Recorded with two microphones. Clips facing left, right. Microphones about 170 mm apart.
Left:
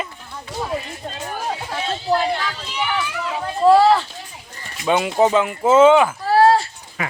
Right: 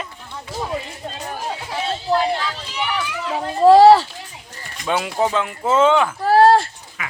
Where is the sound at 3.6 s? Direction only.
35° right (ahead or behind).